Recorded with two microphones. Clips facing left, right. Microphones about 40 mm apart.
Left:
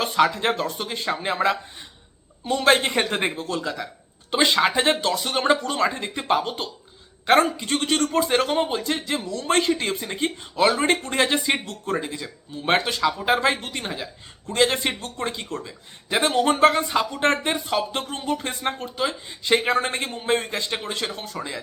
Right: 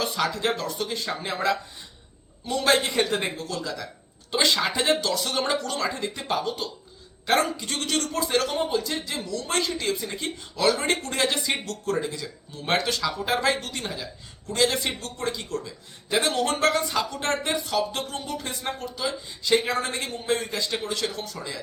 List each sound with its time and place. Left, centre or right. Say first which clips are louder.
0.0 s speech: left 5 dB; left